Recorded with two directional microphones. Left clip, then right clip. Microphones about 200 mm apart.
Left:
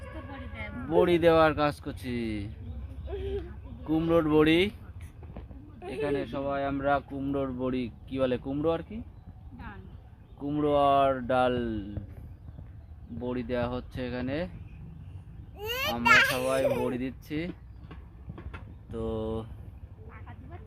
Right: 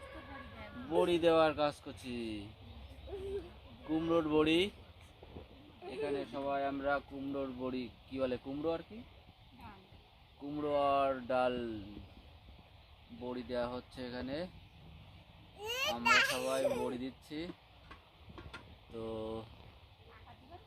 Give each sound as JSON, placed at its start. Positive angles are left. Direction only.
{"t": 0.9, "sound": "speech", "side_deg": 5}
{"t": 3.8, "sound": "speech", "side_deg": 5}
{"t": 5.8, "sound": "speech", "side_deg": 10}
{"t": 10.6, "sound": "speech", "side_deg": 20}
{"t": 13.2, "sound": "speech", "side_deg": 15}
{"t": 15.5, "sound": "speech", "side_deg": 5}
{"t": 18.9, "sound": "speech", "side_deg": 10}